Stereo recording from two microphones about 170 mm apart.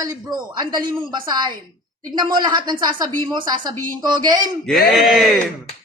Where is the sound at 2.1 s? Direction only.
25° right (ahead or behind).